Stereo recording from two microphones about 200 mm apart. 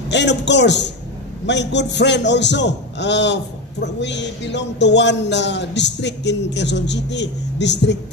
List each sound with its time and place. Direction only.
0.1 s speech: 60° left (ahead or behind)